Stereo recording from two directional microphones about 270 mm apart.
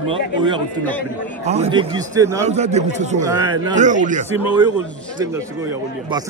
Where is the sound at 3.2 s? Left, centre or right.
Centre.